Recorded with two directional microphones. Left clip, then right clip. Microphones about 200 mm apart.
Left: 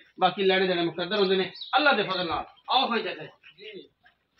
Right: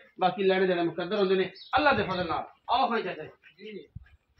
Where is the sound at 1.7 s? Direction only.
20° left (ahead or behind).